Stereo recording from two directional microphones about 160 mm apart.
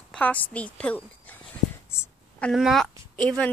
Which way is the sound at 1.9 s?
15° left (ahead or behind).